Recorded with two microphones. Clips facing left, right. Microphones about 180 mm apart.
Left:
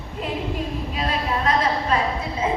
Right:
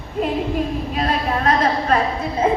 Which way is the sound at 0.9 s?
50° right (ahead or behind).